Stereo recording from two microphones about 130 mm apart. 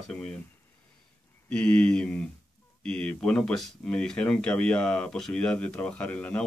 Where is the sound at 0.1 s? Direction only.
10° left (ahead or behind).